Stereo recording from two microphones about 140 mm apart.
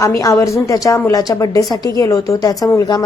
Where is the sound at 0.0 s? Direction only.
20° left (ahead or behind).